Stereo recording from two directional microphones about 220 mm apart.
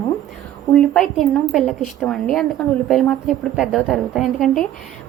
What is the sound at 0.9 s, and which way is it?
Speech, centre (ahead or behind).